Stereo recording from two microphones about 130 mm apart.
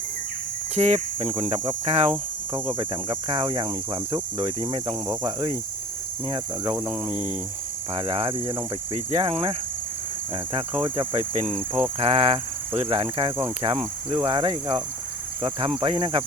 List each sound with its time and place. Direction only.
0.8 s cricket: 40° right (ahead or behind)
6.2 s speech: 40° right (ahead or behind)
6.7 s cricket: 15° right (ahead or behind)
7.9 s cricket: 40° right (ahead or behind)
11.7 s speech: 45° right (ahead or behind)
12.8 s cricket: 40° right (ahead or behind)
15.4 s speech: 40° right (ahead or behind)